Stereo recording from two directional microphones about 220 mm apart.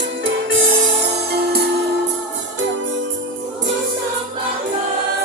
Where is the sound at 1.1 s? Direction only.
50° right (ahead or behind).